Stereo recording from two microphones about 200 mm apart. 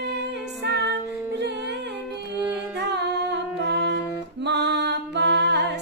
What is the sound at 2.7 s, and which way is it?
Music, 60° right (ahead or behind).